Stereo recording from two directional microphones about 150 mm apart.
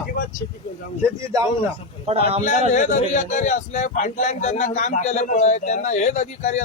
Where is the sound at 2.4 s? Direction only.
55° left (ahead or behind).